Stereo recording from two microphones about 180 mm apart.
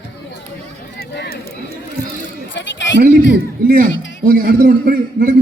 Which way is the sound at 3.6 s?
50° right (ahead or behind).